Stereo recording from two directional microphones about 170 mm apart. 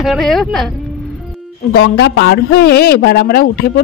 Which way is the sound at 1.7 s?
75° left (ahead or behind).